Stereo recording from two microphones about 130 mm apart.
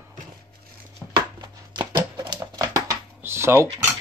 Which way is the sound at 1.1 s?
35° right (ahead or behind).